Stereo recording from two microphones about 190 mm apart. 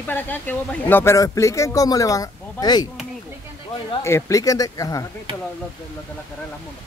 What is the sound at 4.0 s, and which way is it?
Speech, 15° left (ahead or behind).